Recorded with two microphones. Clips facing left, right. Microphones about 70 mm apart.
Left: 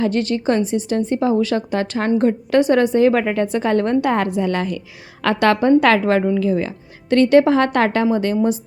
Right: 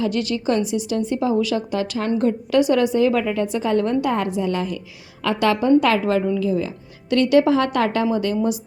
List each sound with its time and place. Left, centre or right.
0.0 s a woman's voice: left